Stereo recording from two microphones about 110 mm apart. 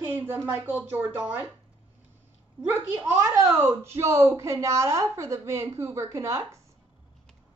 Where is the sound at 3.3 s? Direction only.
25° right (ahead or behind).